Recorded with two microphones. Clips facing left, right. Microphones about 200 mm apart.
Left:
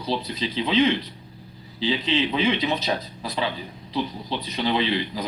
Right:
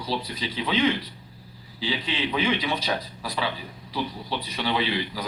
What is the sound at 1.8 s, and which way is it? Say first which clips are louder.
A man's voice: left 5 dB; 25° left (ahead or behind).